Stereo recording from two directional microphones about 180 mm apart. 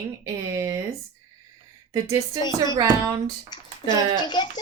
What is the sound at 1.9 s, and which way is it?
Speech, 20° right (ahead or behind).